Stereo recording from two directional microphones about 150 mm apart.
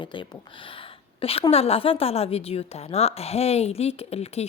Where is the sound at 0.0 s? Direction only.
30° left (ahead or behind).